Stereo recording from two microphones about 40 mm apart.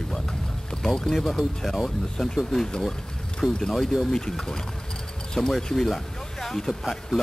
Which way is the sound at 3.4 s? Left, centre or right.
Centre.